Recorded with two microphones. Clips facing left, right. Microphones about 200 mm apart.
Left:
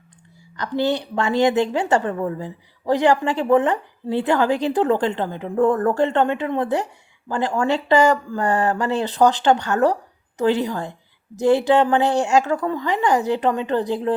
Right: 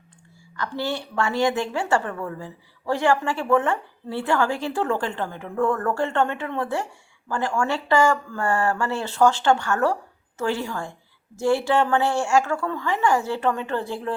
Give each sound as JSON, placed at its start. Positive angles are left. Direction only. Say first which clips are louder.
{"t": 0.5, "sound": "a woman's voice", "louder": "left 6 dB", "side_deg": 20}